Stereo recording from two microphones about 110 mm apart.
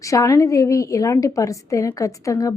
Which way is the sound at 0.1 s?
30° left (ahead or behind).